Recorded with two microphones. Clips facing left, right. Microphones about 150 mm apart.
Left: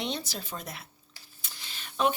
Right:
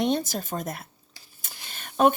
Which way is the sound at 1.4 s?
50° right (ahead or behind).